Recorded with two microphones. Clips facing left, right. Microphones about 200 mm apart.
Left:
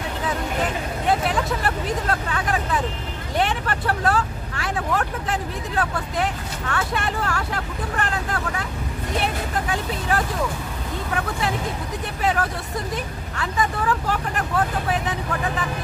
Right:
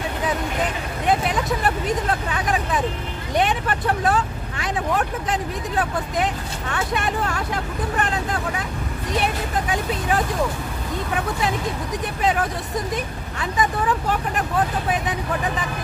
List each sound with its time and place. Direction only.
1.0 s speech: 15° right (ahead or behind)
9.7 s speech: 20° right (ahead or behind)
12.2 s speech: 20° right (ahead or behind)